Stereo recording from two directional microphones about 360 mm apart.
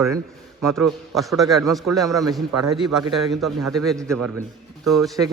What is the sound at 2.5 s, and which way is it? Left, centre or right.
Speech, right.